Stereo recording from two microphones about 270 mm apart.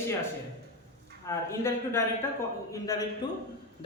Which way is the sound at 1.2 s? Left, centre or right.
Centre.